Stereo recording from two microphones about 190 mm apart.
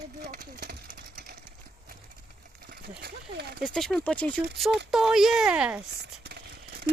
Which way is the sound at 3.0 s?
60° right (ahead or behind).